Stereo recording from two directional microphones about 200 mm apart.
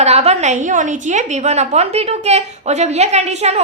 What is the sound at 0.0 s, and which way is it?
A woman's voice, 30° right (ahead or behind).